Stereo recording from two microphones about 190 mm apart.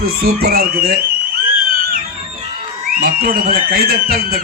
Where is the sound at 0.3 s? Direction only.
55° right (ahead or behind).